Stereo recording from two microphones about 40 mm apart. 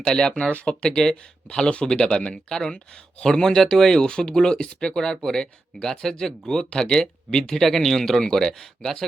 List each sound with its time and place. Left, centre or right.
0.0 s speech: centre
0.9 s speech: centre
1.5 s speech: left
2.7 s speech: left
3.2 s speech: centre
4.7 s speech: left
4.9 s speech: centre